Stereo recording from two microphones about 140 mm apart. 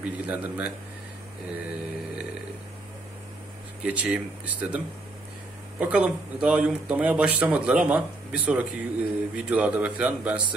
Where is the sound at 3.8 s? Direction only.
10° right (ahead or behind).